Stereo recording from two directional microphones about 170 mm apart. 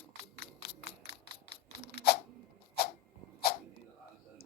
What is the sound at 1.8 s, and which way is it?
Crunch, 65° left (ahead or behind).